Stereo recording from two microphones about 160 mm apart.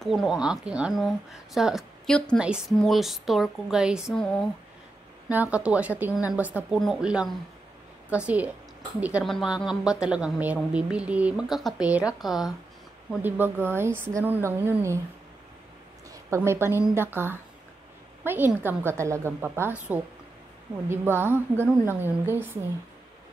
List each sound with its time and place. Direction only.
0.0 s a woman's voice: centre (ahead or behind)
5.3 s a woman's voice: 10° right (ahead or behind)
13.1 s a woman's voice: 10° right (ahead or behind)
16.1 s a woman's voice: 15° right (ahead or behind)